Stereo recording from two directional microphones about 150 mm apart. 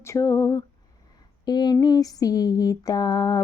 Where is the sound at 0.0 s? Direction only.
20° left (ahead or behind).